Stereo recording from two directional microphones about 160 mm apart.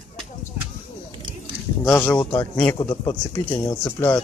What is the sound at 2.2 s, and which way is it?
Speech, 30° left (ahead or behind).